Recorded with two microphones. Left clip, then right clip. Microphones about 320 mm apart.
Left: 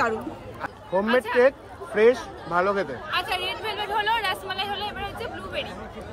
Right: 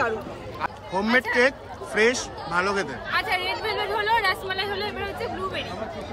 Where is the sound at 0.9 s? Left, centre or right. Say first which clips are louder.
Left 1 dB; centre.